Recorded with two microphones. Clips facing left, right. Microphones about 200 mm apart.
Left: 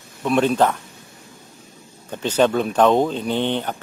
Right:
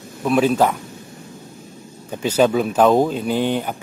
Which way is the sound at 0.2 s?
5° right (ahead or behind).